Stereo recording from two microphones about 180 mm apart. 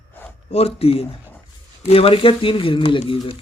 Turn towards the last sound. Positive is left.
turn(degrees=30)  # may be behind; listen again after turning